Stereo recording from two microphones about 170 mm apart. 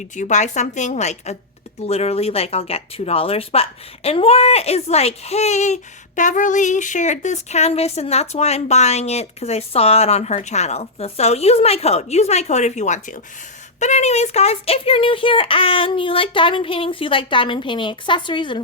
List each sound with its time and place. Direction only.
0.2 s a woman's voice: 45° left (ahead or behind); by 18.6 s 30° left (ahead or behind)